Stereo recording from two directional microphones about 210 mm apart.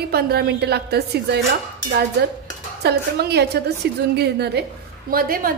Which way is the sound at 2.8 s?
50° right (ahead or behind).